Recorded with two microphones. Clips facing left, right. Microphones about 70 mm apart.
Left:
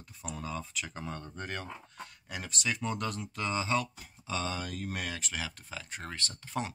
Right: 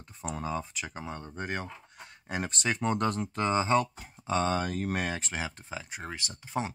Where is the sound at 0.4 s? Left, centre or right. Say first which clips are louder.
Right 4 dB; right.